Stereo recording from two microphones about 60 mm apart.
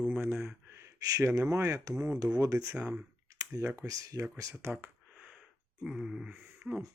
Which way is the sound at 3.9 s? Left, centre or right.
Right.